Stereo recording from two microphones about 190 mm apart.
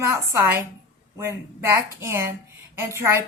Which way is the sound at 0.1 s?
15° right (ahead or behind).